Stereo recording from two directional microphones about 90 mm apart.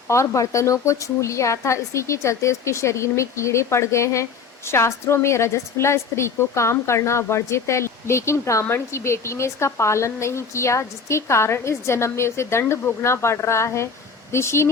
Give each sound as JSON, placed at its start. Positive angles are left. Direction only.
{"t": 0.1, "sound": "a woman's voice", "side_deg": 35}